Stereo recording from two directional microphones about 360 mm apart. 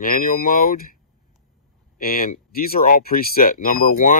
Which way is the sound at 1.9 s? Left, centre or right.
Left.